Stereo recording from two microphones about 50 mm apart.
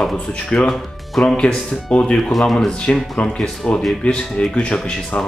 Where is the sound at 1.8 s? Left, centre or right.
Centre.